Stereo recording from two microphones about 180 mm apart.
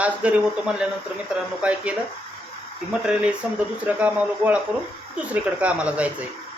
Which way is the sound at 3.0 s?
5° right (ahead or behind).